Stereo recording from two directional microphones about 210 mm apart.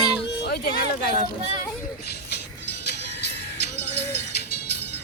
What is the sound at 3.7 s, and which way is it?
Music, 55° left (ahead or behind).